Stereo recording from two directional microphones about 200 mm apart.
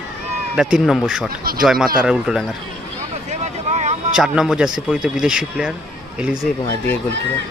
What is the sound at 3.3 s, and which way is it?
Vehicle, 35° right (ahead or behind).